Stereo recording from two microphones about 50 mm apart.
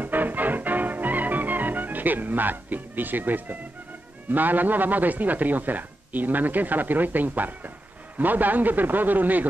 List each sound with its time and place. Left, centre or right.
0.0 s music: right
4.3 s a man's voice: right